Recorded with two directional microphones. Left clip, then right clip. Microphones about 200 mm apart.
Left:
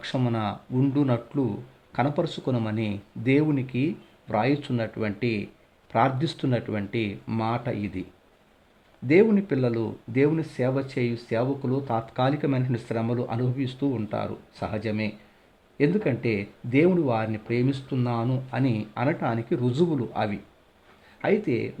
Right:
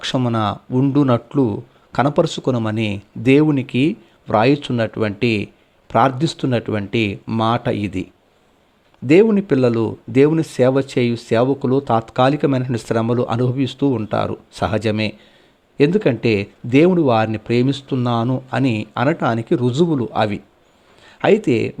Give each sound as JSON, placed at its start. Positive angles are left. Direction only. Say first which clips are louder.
{"t": 0.0, "sound": "speech", "louder": "right 9 dB", "side_deg": -25}
{"t": 9.0, "sound": "speech", "louder": "right 7 dB", "side_deg": -25}